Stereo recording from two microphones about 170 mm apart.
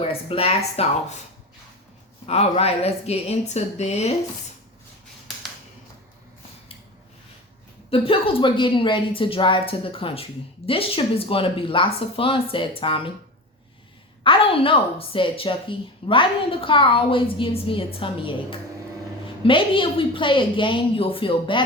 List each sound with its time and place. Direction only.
0.0 s a woman's voice: 35° left (ahead or behind)
2.2 s a woman's voice: 35° left (ahead or behind)
7.9 s a woman's voice: 35° left (ahead or behind)
14.3 s a woman's voice: 30° left (ahead or behind)